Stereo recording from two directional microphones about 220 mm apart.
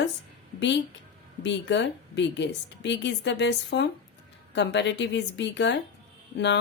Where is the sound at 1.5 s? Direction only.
50° left (ahead or behind).